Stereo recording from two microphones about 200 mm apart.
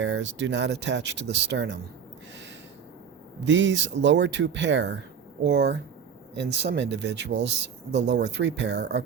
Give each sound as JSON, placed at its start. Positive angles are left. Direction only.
{"t": 0.0, "sound": "speech", "side_deg": -65}
{"t": 3.4, "sound": "speech", "side_deg": -65}